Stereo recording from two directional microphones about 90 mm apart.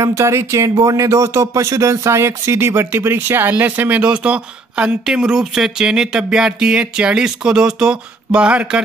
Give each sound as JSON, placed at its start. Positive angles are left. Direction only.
{"t": 0.0, "sound": "speech", "side_deg": -35}